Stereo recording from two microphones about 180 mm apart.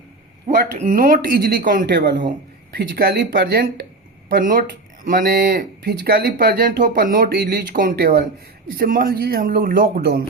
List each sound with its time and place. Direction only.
0.4 s speech: 45° right (ahead or behind)
1.9 s speech: 70° right (ahead or behind)
2.7 s speech: 55° right (ahead or behind)
4.3 s speech: 50° right (ahead or behind)